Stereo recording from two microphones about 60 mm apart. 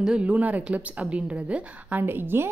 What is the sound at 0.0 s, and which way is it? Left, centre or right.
A woman's voice, centre.